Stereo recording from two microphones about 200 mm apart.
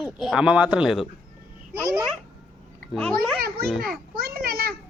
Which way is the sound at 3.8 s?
50° right (ahead or behind).